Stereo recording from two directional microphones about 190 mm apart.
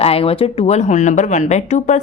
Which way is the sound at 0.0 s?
30° left (ahead or behind).